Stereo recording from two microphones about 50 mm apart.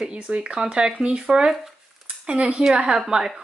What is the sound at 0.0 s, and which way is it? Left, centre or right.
Speech, right.